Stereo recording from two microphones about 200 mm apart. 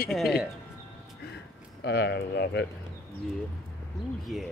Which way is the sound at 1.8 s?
55° left (ahead or behind).